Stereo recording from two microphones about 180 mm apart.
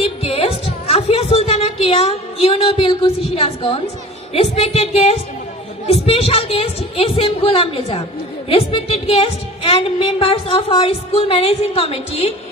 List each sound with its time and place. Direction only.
0.0 s music: 30° left (ahead or behind)
5.9 s a woman's voice: 35° left (ahead or behind)